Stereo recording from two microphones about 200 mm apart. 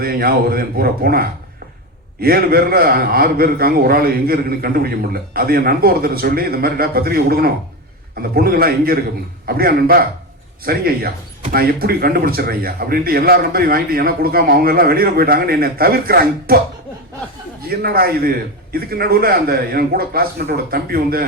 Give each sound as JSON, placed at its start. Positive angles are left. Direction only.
{"t": 0.0, "sound": "a man's voice", "side_deg": -50}
{"t": 17.6, "sound": "a man's voice", "side_deg": -50}